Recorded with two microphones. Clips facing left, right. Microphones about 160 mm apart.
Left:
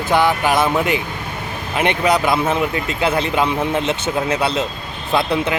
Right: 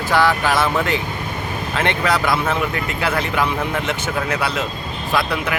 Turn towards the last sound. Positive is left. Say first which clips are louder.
# left 3 dB
turn(degrees=25)  # may be behind; listen again after turning